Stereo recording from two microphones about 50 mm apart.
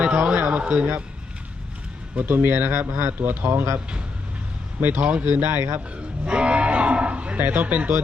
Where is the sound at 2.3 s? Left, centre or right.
Right.